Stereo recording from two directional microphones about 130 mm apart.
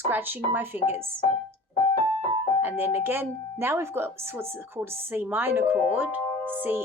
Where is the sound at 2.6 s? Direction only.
15° right (ahead or behind).